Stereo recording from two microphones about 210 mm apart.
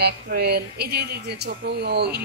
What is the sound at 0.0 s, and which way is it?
Speech, 50° right (ahead or behind).